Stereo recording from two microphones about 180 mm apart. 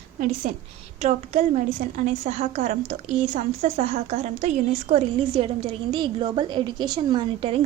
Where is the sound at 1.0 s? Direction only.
40° right (ahead or behind).